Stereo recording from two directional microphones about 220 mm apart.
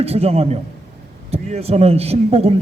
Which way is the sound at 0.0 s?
25° right (ahead or behind).